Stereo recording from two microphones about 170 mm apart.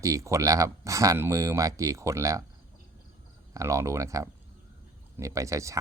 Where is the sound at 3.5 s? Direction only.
20° right (ahead or behind).